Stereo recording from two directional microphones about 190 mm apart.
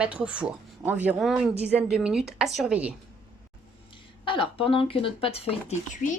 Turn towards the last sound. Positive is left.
turn(degrees=40)  # may be behind; listen again after turning